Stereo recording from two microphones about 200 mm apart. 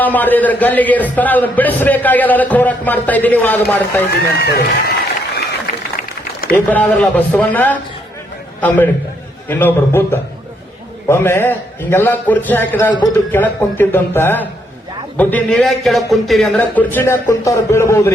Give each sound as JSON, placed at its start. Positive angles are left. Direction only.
{"t": 0.0, "sound": "a man's voice", "side_deg": 10}
{"t": 4.1, "sound": "a man's voice", "side_deg": 50}
{"t": 6.5, "sound": "a man's voice", "side_deg": 10}